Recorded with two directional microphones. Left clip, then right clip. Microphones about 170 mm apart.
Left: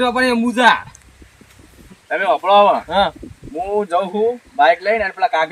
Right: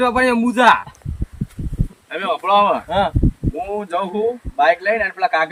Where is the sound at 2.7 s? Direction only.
25° right (ahead or behind).